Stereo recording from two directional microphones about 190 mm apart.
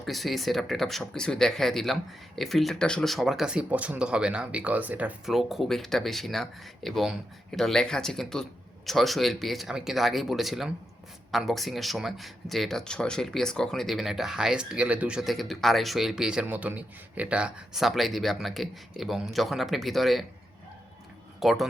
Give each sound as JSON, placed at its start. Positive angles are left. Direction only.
{"t": 0.0, "sound": "speech", "side_deg": 0}
{"t": 21.4, "sound": "speech", "side_deg": 0}